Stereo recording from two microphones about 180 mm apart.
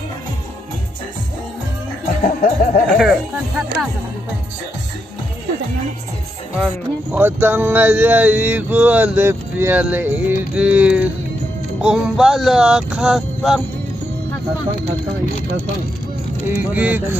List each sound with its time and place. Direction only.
2.2 s music: 45° left (ahead or behind)
3.0 s music: centre (ahead or behind)
6.5 s speech: 5° right (ahead or behind)
11.8 s music: 5° right (ahead or behind)
16.4 s speech: 10° right (ahead or behind)